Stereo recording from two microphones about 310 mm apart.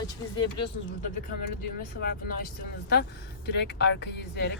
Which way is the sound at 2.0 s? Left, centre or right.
Left.